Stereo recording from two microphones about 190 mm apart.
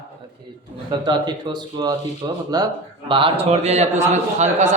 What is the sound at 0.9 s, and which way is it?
A man's voice, 20° right (ahead or behind).